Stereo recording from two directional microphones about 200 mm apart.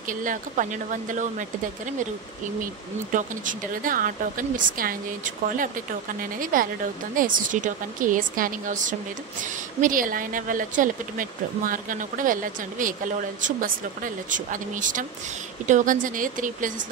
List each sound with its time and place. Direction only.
0.0 s a woman's voice: 40° right (ahead or behind)
2.6 s a woman's voice: 40° right (ahead or behind)